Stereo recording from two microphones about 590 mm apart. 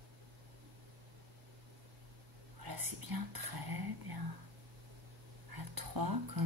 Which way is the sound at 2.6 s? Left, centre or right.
Right.